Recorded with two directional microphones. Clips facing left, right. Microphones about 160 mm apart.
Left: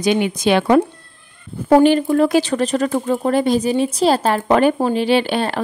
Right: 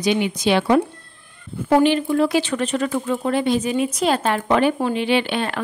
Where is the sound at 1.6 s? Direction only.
40° left (ahead or behind).